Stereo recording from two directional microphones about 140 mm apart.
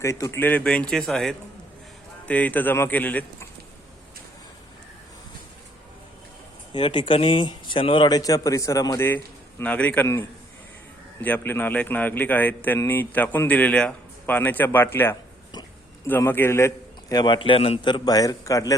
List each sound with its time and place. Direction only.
0.0 s a man's voice: 20° left (ahead or behind)
6.7 s a man's voice: 35° left (ahead or behind)